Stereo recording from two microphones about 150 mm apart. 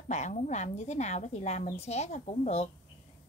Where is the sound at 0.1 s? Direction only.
50° left (ahead or behind).